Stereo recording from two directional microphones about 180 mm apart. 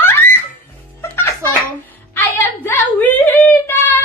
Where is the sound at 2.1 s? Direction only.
15° left (ahead or behind).